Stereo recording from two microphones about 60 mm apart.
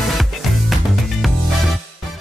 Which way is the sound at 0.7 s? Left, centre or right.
Centre.